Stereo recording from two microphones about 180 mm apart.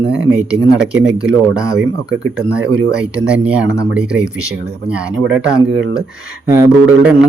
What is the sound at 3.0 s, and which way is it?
A man's voice, 5° right (ahead or behind).